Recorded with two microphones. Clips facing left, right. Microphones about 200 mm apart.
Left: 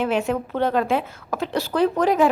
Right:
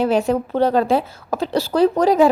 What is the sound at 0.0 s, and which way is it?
A woman's voice, 35° right (ahead or behind).